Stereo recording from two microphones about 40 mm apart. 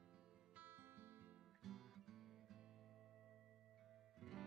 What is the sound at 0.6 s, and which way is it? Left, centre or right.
Music, right.